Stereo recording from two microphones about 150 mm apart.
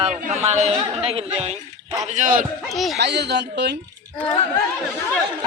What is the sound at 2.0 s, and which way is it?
Speech, 55° right (ahead or behind).